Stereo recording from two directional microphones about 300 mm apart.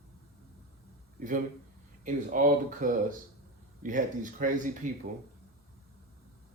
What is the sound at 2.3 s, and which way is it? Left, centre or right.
Speech, right.